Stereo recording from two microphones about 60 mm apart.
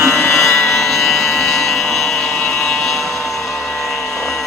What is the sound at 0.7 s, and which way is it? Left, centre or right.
Vehicle, centre.